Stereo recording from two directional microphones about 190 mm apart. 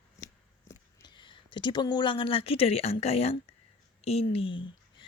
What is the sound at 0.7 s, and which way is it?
A woman's voice, 25° left (ahead or behind).